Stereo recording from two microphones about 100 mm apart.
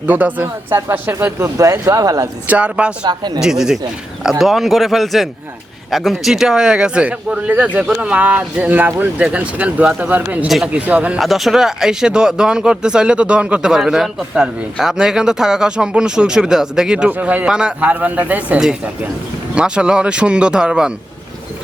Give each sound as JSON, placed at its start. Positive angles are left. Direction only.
{"t": 0.0, "sound": "speech", "side_deg": -15}
{"t": 2.5, "sound": "speech", "side_deg": -10}
{"t": 3.0, "sound": "speech", "side_deg": -45}
{"t": 3.4, "sound": "speech", "side_deg": -5}
{"t": 11.2, "sound": "speech", "side_deg": 0}